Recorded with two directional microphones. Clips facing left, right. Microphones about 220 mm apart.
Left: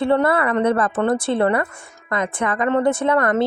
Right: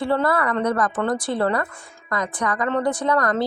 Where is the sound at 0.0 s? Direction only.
20° left (ahead or behind).